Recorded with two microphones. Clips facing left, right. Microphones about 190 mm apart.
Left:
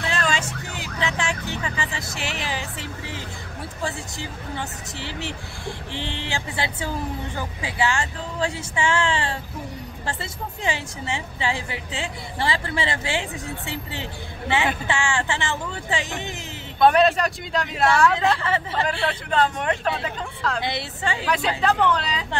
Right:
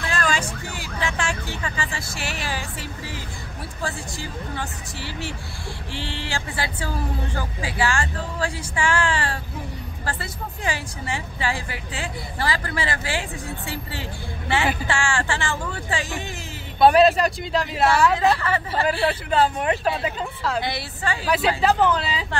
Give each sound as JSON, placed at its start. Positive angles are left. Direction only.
{"t": 0.0, "sound": "vehicle", "side_deg": 25}
{"t": 3.8, "sound": "a woman's voice", "side_deg": 20}
{"t": 10.6, "sound": "a woman's voice", "side_deg": 20}
{"t": 16.8, "sound": "speech", "side_deg": -5}
{"t": 20.6, "sound": "a woman's voice", "side_deg": 25}
{"t": 21.3, "sound": "speech", "side_deg": -5}